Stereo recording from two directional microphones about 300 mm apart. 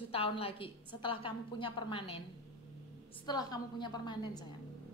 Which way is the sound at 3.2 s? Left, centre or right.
Centre.